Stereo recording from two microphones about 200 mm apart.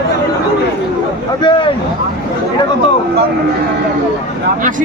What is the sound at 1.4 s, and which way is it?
Speech, 25° left (ahead or behind).